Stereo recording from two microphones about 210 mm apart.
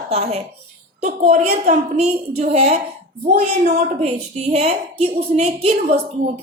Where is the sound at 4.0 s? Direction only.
30° right (ahead or behind).